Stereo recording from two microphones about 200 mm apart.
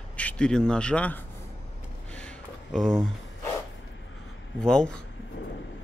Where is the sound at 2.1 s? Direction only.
5° left (ahead or behind).